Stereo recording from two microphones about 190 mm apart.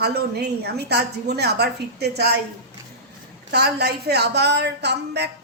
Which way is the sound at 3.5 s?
60° right (ahead or behind).